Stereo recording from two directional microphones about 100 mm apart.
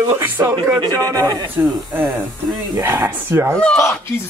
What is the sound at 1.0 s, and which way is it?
Speech, 40° right (ahead or behind).